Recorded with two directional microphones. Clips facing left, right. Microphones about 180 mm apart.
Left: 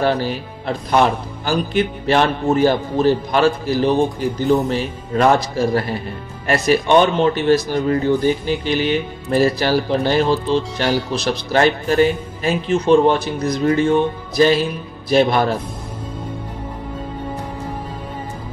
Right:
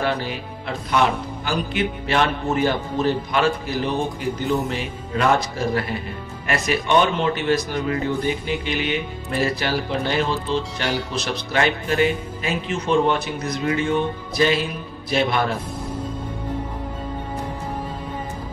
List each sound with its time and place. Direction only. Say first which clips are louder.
0.0 s speech: left 5 dB; 35° left (ahead or behind)
10.9 s speech: left 7 dB; centre (ahead or behind)
11.1 s speech: left 5 dB; 35° left (ahead or behind)